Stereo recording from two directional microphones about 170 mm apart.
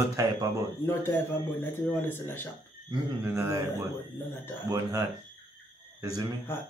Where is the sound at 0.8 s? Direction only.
15° left (ahead or behind).